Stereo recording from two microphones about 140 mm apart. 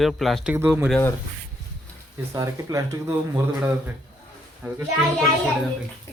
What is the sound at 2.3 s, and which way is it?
Speech, 20° right (ahead or behind).